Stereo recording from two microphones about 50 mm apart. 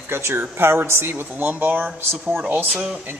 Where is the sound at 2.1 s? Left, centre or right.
Centre.